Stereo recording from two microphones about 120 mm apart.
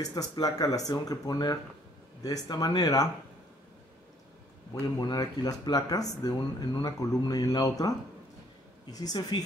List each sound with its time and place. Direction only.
0.0 s speech: 30° left (ahead or behind)
4.9 s speech: 35° left (ahead or behind)